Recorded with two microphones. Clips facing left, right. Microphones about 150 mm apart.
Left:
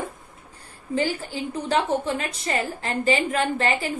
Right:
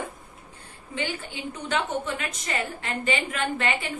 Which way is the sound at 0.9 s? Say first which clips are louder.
Left 7 dB; 35° left (ahead or behind).